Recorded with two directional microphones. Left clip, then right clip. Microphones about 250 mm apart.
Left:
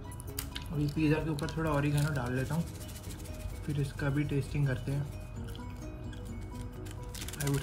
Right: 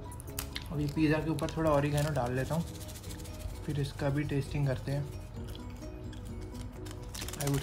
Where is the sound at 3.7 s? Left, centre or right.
Right.